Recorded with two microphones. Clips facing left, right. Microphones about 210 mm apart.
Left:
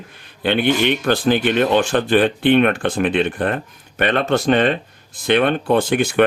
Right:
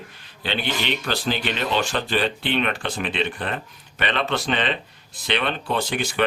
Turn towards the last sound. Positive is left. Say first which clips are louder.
# left 8 dB
turn(degrees=50)  # may be behind; listen again after turning